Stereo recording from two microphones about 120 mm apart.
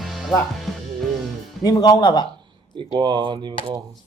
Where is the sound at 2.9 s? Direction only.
35° right (ahead or behind).